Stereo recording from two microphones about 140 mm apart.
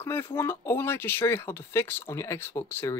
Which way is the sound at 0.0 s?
20° left (ahead or behind).